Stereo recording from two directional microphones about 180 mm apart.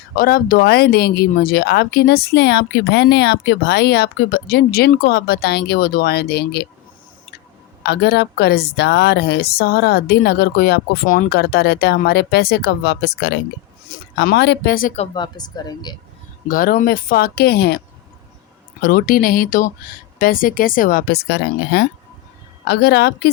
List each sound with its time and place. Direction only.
0.2 s speech: 55° left (ahead or behind)
7.9 s speech: 65° left (ahead or behind)
13.8 s speech: 55° left (ahead or behind)
14.9 s speech: 30° left (ahead or behind)
16.5 s speech: 50° left (ahead or behind)
18.8 s speech: 55° left (ahead or behind)